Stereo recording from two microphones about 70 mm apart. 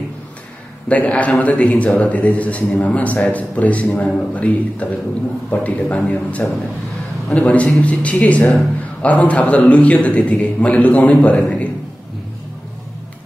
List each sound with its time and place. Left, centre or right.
0.8 s a man's voice: left